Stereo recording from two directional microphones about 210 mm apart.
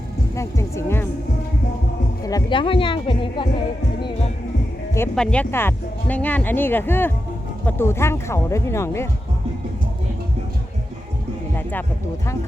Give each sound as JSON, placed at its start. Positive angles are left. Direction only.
{"t": 0.3, "sound": "speech", "side_deg": 15}
{"t": 2.2, "sound": "speech", "side_deg": 20}
{"t": 4.9, "sound": "speech", "side_deg": 5}
{"t": 11.5, "sound": "speech", "side_deg": 10}